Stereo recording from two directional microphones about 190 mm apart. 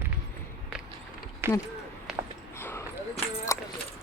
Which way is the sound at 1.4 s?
10° right (ahead or behind).